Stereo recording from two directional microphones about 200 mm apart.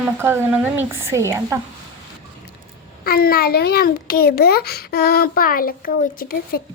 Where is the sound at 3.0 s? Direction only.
50° left (ahead or behind).